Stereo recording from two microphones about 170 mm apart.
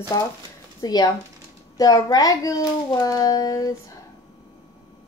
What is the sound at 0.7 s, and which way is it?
A child's voice, 20° left (ahead or behind).